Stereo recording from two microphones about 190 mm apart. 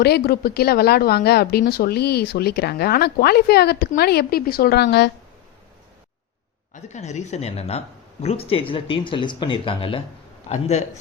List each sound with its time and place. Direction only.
0.0 s speech: 55° left (ahead or behind)
6.8 s speech: 35° left (ahead or behind)